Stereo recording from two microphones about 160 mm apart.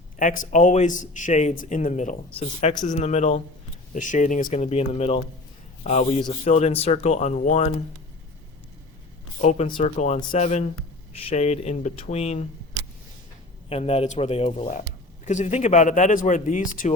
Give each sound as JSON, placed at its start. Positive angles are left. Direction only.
{"t": 0.2, "sound": "a man's voice", "side_deg": 55}
{"t": 9.4, "sound": "a man's voice", "side_deg": 45}
{"t": 9.6, "sound": "a man's voice", "side_deg": 30}
{"t": 10.3, "sound": "a man's voice", "side_deg": 45}
{"t": 13.7, "sound": "a man's voice", "side_deg": 40}
{"t": 14.7, "sound": "a man's voice", "side_deg": 50}